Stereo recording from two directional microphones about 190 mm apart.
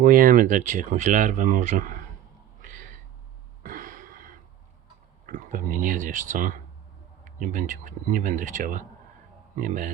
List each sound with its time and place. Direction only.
0.0 s speech: 45° right (ahead or behind)
2.6 s a sound: 45° right (ahead or behind)
5.2 s speech: 45° right (ahead or behind)